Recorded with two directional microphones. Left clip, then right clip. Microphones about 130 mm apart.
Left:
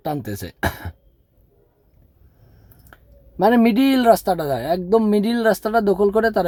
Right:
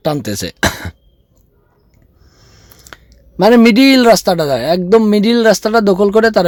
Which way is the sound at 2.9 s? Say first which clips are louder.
Right 8 dB; 25° right (ahead or behind).